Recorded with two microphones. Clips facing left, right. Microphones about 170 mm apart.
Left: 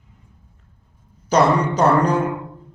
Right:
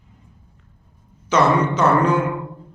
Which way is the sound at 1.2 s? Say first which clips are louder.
Left 1 dB; 40° left (ahead or behind).